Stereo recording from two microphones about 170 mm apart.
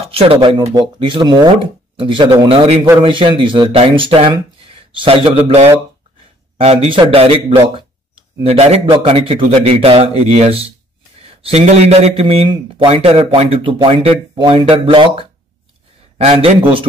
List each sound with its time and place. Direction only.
0.0 s a man's voice: 35° right (ahead or behind)